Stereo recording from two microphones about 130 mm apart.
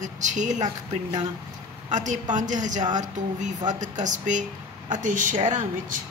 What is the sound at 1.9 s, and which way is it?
Speech, 70° right (ahead or behind).